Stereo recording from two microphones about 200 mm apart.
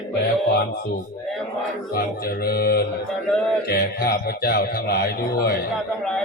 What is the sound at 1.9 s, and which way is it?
Speech, 50° left (ahead or behind).